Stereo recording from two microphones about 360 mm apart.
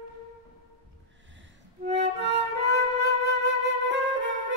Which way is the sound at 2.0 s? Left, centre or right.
Right.